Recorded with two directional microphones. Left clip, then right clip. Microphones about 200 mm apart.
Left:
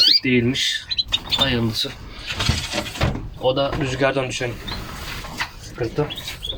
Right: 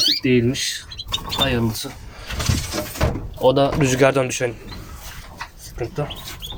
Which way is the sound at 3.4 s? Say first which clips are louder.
Right 4 dB; 60° right (ahead or behind).